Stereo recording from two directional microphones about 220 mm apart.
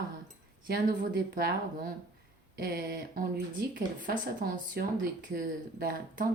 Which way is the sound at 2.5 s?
45° right (ahead or behind).